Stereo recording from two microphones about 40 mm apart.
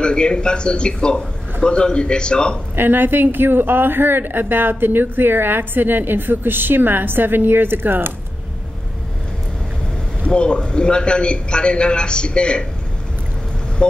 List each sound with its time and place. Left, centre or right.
0.0 s a man's voice: left
2.7 s speech: right
10.2 s a man's voice: left